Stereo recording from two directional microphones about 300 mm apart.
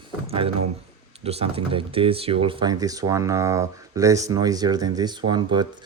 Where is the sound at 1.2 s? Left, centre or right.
Centre.